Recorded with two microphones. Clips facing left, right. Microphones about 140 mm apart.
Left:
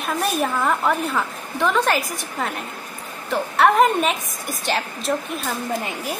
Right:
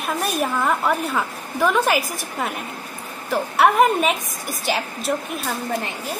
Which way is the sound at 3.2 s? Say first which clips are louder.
Even; 5° right (ahead or behind).